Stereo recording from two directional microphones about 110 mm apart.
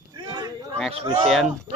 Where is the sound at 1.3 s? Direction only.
Centre (ahead or behind).